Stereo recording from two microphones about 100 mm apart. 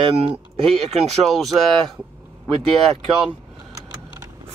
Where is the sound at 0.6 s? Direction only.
75° right (ahead or behind).